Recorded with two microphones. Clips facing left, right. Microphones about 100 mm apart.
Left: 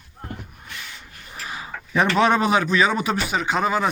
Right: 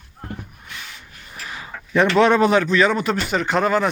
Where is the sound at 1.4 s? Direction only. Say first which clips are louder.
Left 1 dB; 20° left (ahead or behind).